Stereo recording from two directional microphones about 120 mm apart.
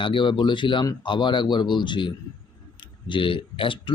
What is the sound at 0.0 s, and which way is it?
A man's voice, 45° left (ahead or behind).